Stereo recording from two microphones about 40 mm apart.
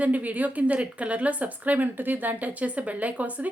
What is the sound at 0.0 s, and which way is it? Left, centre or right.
A woman's voice, right.